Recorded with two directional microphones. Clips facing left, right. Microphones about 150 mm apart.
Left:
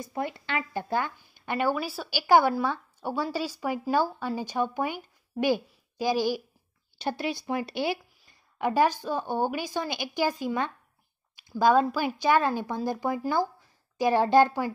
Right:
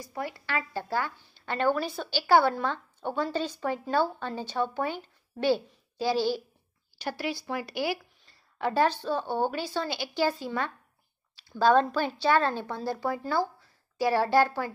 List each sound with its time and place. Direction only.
0.0 s a woman's voice: 20° left (ahead or behind)